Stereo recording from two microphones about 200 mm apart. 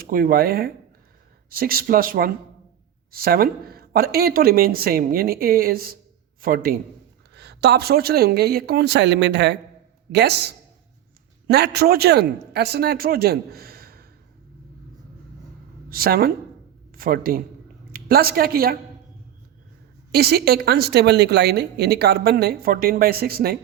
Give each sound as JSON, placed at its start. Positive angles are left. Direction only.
{"t": 0.0, "sound": "a woman's voice", "side_deg": -45}
{"t": 7.3, "sound": "a woman's voice", "side_deg": -55}
{"t": 15.9, "sound": "a man's voice", "side_deg": -50}
{"t": 20.1, "sound": "a woman's voice", "side_deg": -50}